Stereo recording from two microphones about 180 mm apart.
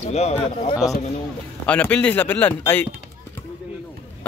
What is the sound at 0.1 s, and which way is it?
Speech, 35° left (ahead or behind).